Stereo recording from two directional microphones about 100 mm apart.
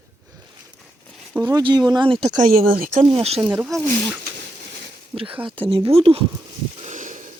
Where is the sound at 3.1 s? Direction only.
90° right.